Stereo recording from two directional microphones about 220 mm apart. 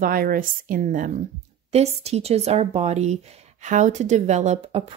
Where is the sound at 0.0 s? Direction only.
40° right (ahead or behind).